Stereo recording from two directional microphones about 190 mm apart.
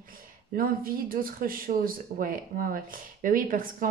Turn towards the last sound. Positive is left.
turn(degrees=-45)  # may be behind; listen again after turning